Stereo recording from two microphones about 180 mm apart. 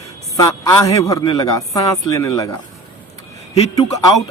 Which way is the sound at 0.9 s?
20° left (ahead or behind).